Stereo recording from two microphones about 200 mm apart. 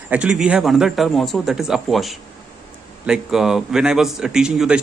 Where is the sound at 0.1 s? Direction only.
5° right (ahead or behind).